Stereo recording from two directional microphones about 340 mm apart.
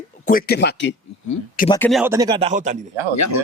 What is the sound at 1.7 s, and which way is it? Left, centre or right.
Speech, centre.